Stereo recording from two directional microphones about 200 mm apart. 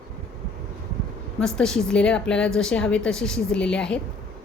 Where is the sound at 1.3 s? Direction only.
5° left (ahead or behind).